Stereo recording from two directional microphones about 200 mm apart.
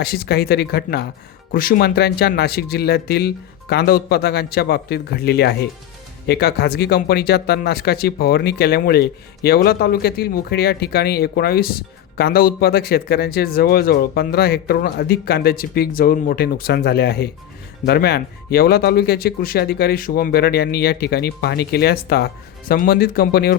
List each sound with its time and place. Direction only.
0.0 s speech: 50° left (ahead or behind)